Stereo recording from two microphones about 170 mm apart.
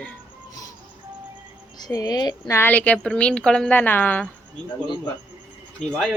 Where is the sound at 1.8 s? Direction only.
20° left (ahead or behind).